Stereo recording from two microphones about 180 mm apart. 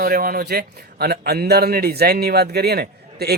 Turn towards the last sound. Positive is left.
turn(degrees=-60)  # may be behind; listen again after turning